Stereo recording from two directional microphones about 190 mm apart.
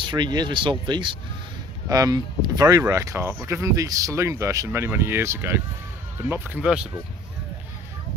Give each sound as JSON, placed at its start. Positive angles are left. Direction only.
{"t": 0.0, "sound": "speech", "side_deg": -25}